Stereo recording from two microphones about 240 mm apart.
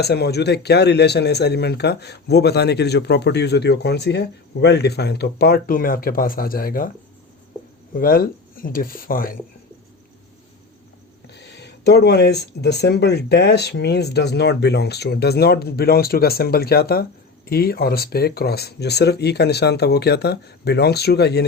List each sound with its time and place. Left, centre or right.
0.0 s speech: left
7.9 s speech: left
11.3 s speech: left